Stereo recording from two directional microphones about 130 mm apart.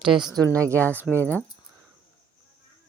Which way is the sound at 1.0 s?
15° left (ahead or behind).